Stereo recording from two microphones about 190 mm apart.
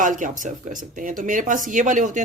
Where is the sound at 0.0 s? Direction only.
45° right (ahead or behind).